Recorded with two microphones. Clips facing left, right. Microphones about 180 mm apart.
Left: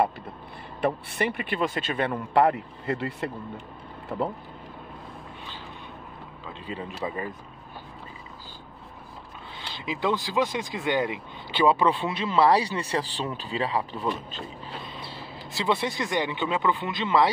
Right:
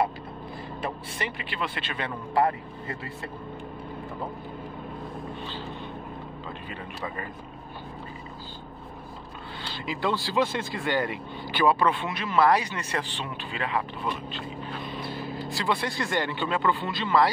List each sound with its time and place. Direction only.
0.8 s speech: 55° left (ahead or behind); by 4.4 s 75° left (ahead or behind)
6.7 s speech: 20° left (ahead or behind)
9.6 s speech: 20° left (ahead or behind); by 13.8 s 35° left (ahead or behind)
14.9 s speech: 30° left (ahead or behind)